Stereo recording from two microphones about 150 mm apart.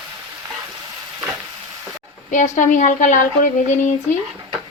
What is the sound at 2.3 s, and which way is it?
Speech, 55° left (ahead or behind).